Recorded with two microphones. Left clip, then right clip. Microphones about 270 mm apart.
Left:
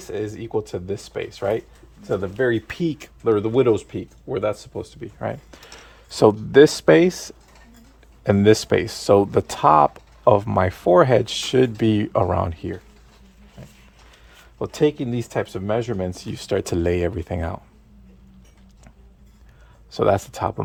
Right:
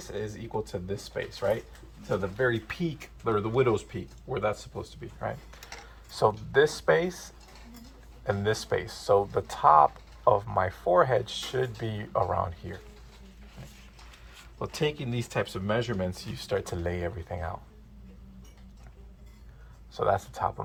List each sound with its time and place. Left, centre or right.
0.0 s speech: left
14.6 s speech: left
19.9 s speech: left